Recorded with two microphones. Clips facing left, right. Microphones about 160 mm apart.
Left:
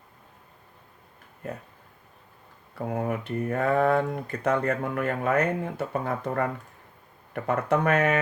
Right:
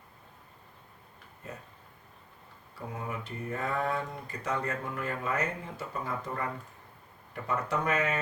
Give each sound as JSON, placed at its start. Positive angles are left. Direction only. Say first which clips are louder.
{"t": 2.7, "sound": "speech", "louder": "left 9 dB", "side_deg": 60}